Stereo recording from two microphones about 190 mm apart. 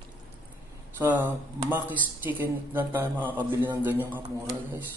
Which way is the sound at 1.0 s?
10° right (ahead or behind).